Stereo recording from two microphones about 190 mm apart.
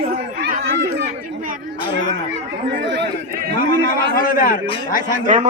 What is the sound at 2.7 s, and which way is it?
Chatter, 65° right (ahead or behind).